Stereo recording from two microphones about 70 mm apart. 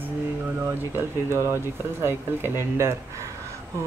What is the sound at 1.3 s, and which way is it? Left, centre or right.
Speech, right.